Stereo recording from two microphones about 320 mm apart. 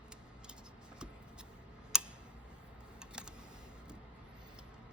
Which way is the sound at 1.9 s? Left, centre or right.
Centre.